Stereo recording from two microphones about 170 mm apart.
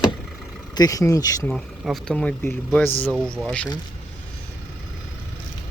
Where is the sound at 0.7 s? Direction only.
20° left (ahead or behind).